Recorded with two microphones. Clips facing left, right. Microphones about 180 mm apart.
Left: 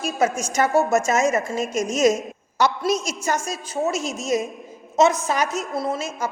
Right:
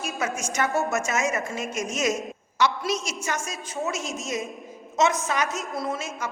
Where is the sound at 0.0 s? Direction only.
35° left (ahead or behind).